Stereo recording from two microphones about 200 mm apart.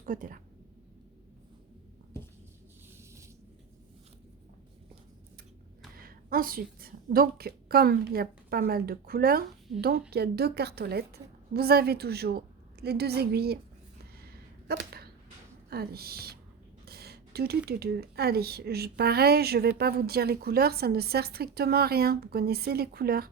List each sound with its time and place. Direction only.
0.0 s speech: 40° right (ahead or behind)
6.0 s a woman's voice: 45° right (ahead or behind)
14.0 s a sound: 50° right (ahead or behind)
15.7 s speech: 50° right (ahead or behind)
16.8 s a sound: 50° right (ahead or behind)
17.7 s speech: 50° right (ahead or behind)